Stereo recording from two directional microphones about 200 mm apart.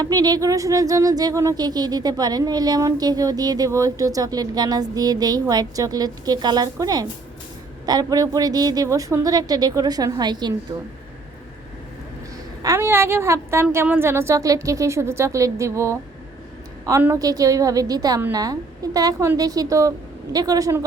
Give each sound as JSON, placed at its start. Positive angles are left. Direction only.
{"t": 0.0, "sound": "speech", "side_deg": -20}
{"t": 12.6, "sound": "a woman's voice", "side_deg": -15}